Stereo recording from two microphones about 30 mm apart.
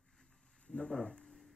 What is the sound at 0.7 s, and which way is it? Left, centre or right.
Speech, left.